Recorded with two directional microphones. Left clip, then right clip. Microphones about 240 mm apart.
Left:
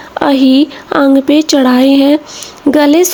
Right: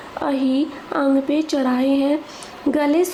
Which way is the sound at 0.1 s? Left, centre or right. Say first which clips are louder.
Left 12 dB; left.